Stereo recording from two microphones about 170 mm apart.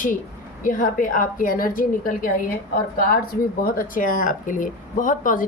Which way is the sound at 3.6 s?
55° left (ahead or behind).